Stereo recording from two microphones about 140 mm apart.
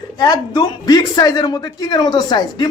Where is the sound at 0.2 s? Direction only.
30° left (ahead or behind).